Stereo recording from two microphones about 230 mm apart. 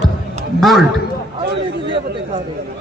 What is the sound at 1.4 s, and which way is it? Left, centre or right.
Speech, right.